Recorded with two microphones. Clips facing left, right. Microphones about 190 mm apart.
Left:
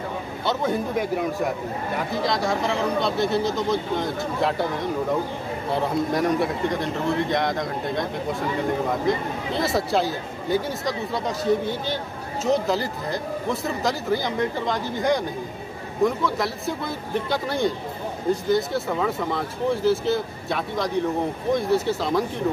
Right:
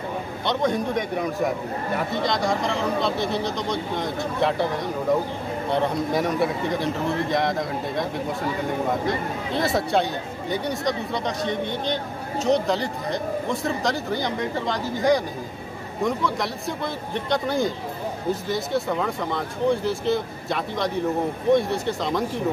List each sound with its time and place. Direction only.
0.5 s speech: 5° left (ahead or behind)
5.7 s speech: centre (ahead or behind)